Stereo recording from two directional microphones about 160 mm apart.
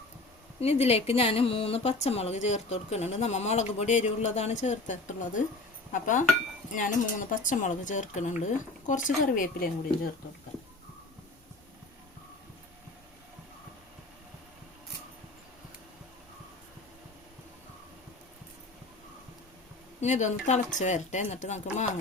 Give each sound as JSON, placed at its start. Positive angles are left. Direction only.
{"t": 0.6, "sound": "speech", "side_deg": 40}
{"t": 20.0, "sound": "speech", "side_deg": 50}